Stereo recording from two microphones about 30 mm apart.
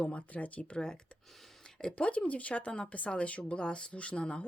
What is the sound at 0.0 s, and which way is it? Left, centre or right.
Speech, left.